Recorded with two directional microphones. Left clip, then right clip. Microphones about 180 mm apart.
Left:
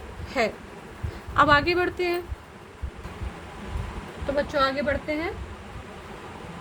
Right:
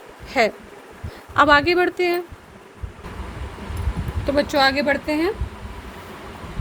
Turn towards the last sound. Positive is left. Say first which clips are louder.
# right 6 dB
turn(degrees=-40)  # may be behind; listen again after turning